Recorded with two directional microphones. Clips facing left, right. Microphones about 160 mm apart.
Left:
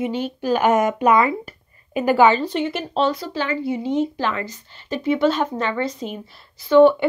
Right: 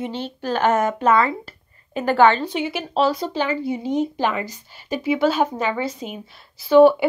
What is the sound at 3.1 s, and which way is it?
A woman's voice, 20° right (ahead or behind).